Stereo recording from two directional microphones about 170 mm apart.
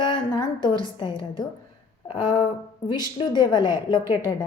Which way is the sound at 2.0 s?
30° left (ahead or behind).